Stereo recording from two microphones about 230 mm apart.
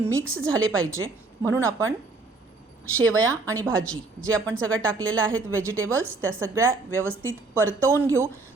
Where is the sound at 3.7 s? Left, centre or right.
Right.